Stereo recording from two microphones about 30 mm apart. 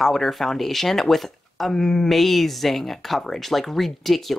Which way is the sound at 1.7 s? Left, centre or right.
Centre.